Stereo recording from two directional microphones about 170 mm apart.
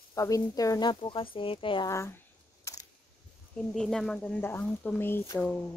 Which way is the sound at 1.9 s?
15° left (ahead or behind).